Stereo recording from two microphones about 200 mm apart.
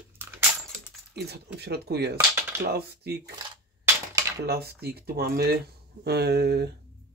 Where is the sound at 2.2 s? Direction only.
10° right (ahead or behind).